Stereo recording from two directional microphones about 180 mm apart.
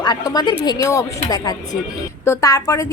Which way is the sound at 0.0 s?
20° left (ahead or behind).